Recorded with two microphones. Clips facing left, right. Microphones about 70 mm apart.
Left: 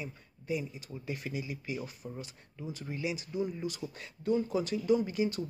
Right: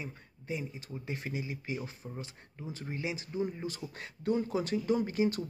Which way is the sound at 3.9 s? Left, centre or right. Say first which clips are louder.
Left 1 dB; right.